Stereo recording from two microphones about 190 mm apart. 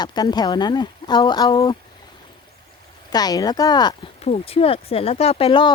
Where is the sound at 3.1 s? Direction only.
20° left (ahead or behind).